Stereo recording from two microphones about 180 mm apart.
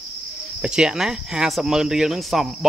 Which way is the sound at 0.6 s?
5° right (ahead or behind).